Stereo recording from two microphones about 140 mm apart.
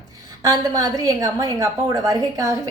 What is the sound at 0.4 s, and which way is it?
A woman's voice, 25° right (ahead or behind).